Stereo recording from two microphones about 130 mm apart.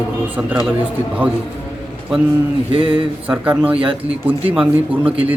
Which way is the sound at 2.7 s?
45° right (ahead or behind).